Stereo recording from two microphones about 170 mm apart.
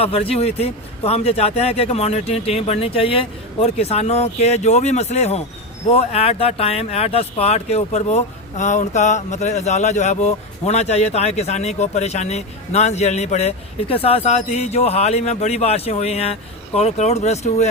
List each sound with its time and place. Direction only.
0.0 s speech: 35° left (ahead or behind)